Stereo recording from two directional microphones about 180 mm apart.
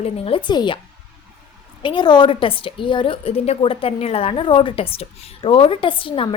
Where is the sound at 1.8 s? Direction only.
25° left (ahead or behind).